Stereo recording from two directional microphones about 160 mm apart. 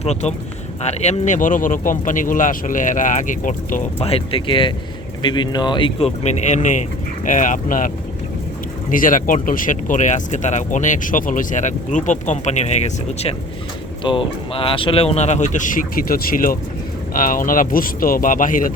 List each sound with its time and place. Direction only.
0.0 s speech: 45° left (ahead or behind)
3.9 s speech: 40° left (ahead or behind); by 7.9 s 55° left (ahead or behind)
8.9 s speech: 55° left (ahead or behind)
14.0 s speech: 35° left (ahead or behind); by 18.7 s 55° left (ahead or behind)